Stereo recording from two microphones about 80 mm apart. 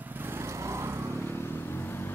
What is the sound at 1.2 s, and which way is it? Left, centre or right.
Vehicle, left.